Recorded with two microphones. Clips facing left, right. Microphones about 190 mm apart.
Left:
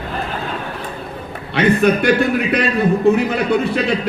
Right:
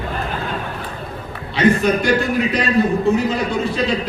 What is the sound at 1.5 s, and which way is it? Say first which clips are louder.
Speech: left 1 dB; 60° left (ahead or behind).